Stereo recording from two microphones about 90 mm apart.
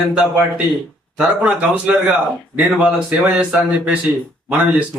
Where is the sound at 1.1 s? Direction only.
15° right (ahead or behind).